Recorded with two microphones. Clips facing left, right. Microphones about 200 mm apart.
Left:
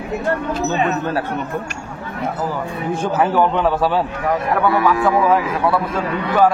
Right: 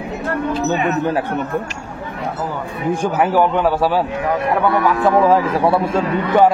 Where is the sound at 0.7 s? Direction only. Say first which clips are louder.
Right 1 dB; 15° right (ahead or behind).